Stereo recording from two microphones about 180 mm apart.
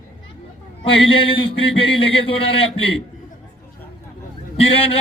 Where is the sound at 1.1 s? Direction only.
30° left (ahead or behind).